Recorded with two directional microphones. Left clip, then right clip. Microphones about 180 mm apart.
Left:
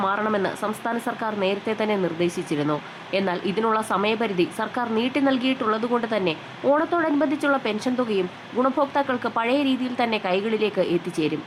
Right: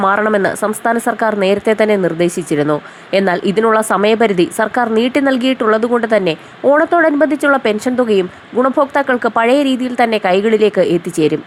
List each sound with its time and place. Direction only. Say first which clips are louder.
0.0 s speech: right 10 dB; 30° right (ahead or behind)